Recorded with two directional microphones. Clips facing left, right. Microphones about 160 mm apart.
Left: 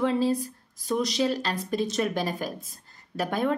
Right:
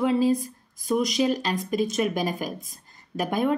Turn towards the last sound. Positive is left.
turn(degrees=-15)  # may be behind; listen again after turning